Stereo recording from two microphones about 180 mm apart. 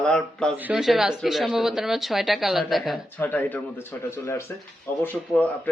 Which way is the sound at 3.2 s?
10° left (ahead or behind).